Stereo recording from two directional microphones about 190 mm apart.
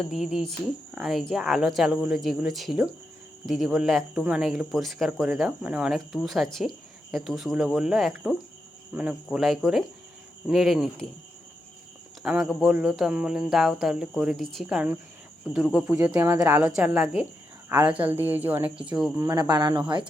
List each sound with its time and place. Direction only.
0.1 s speech: 5° right (ahead or behind)
12.2 s speech: 5° right (ahead or behind)
19.1 s speech: 20° right (ahead or behind)